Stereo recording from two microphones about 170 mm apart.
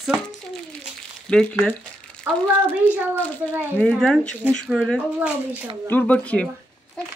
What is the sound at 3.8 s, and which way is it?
Speech, 5° left (ahead or behind).